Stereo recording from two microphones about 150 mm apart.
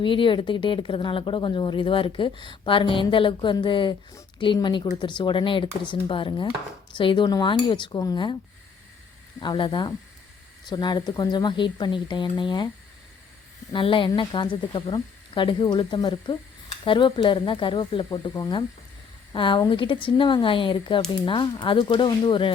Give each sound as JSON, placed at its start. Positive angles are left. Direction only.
{"t": 0.0, "sound": "speech", "side_deg": 35}
{"t": 9.4, "sound": "speech", "side_deg": 30}
{"t": 13.7, "sound": "speech", "side_deg": 35}